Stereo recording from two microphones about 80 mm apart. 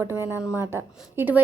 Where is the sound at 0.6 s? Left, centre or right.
Right.